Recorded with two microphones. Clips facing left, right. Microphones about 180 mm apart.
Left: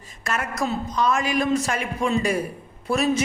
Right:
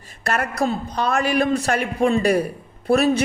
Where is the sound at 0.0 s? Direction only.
65° right (ahead or behind).